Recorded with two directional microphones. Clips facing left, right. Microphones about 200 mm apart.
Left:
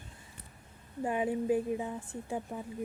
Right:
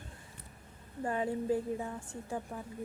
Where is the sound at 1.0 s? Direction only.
15° left (ahead or behind).